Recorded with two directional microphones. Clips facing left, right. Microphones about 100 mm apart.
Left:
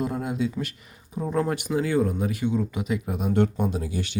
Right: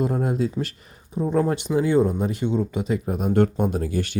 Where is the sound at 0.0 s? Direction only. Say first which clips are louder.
Right 4 dB; 40° right (ahead or behind).